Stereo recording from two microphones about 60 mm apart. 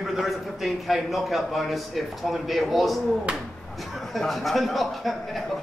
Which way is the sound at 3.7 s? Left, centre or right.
Centre.